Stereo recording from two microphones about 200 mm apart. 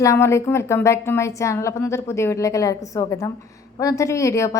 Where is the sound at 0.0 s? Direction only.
15° left (ahead or behind).